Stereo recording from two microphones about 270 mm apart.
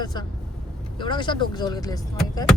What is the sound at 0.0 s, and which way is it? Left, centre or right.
Speech, centre.